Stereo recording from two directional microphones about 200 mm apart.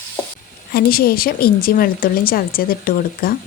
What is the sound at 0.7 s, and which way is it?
Speech, 50° left (ahead or behind).